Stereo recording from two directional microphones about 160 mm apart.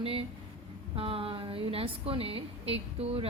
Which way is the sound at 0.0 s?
35° right (ahead or behind).